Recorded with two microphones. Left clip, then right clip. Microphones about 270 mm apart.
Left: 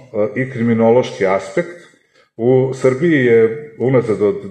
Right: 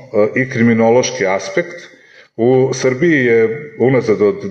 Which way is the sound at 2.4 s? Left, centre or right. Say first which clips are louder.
Right 2 dB; right.